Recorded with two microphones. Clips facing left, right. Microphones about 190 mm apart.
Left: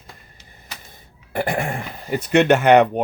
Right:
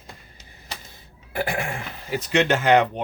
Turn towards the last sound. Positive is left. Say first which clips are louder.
# left 5 dB
turn(degrees=65)  # may be behind; listen again after turning